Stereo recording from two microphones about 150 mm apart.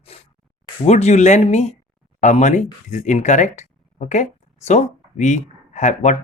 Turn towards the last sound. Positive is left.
turn(degrees=50)  # may be behind; listen again after turning